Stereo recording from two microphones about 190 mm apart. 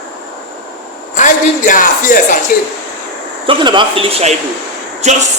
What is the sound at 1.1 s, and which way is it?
Speech, 40° left (ahead or behind).